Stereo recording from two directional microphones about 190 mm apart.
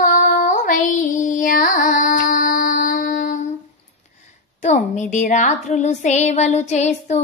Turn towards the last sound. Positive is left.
turn(degrees=35)  # may be behind; listen again after turning